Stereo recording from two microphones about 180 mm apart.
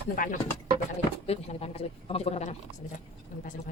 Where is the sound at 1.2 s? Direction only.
35° left (ahead or behind).